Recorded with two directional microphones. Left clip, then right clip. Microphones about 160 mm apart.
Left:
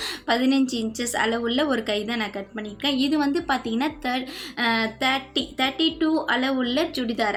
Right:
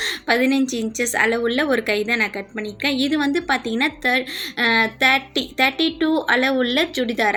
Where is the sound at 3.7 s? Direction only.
20° right (ahead or behind).